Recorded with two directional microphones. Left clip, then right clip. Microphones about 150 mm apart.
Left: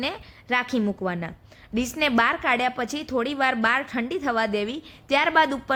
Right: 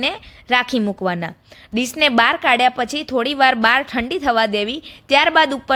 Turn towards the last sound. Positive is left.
turn(degrees=-35)  # may be behind; listen again after turning